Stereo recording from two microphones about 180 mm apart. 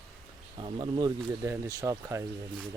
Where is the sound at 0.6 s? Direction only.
25° right (ahead or behind).